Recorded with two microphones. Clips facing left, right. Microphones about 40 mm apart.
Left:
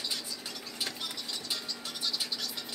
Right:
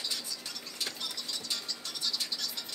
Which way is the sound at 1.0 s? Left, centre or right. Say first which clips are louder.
Left 1 dB; centre.